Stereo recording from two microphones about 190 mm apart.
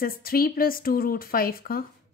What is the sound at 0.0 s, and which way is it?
A woman's voice, 50° left (ahead or behind).